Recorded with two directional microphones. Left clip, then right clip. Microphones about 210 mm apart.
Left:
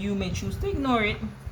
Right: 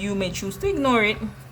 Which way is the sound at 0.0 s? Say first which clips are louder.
Right 5 dB; 35° right (ahead or behind).